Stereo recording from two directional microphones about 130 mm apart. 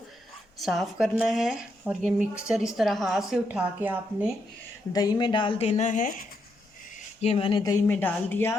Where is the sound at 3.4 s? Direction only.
10° right (ahead or behind).